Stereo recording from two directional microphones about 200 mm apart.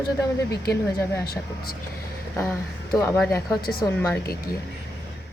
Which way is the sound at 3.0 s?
10° left (ahead or behind).